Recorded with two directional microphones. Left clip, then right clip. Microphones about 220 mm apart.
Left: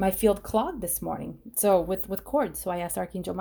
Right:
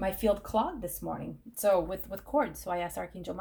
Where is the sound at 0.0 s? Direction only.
55° left (ahead or behind).